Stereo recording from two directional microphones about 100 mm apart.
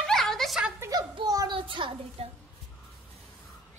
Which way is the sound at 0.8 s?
35° right (ahead or behind).